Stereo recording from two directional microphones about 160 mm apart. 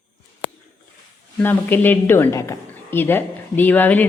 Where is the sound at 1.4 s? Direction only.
15° left (ahead or behind).